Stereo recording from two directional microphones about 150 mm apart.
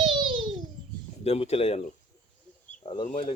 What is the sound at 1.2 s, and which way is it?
Speech, 45° left (ahead or behind).